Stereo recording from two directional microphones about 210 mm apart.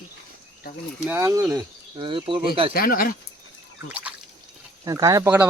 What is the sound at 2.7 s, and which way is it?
Speech, 45° left (ahead or behind).